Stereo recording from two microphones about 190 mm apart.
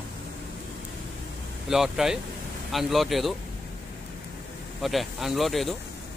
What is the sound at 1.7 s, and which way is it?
Speech, centre (ahead or behind).